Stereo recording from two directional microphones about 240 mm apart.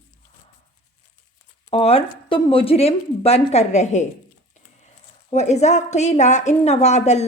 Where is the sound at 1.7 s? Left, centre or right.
Left.